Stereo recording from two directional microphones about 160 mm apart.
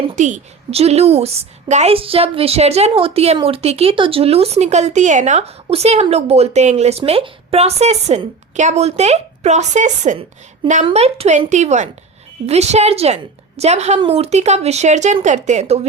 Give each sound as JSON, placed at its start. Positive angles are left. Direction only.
{"t": 0.2, "sound": "a woman's voice", "side_deg": -50}